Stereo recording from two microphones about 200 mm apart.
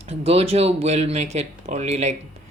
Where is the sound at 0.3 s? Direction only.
30° right (ahead or behind).